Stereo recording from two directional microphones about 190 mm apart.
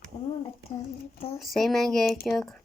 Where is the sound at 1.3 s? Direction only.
Centre (ahead or behind).